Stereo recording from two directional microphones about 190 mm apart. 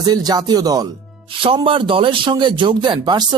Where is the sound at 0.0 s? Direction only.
20° right (ahead or behind).